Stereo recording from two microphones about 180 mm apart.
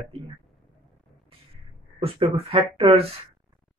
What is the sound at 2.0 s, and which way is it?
Speech, 30° right (ahead or behind).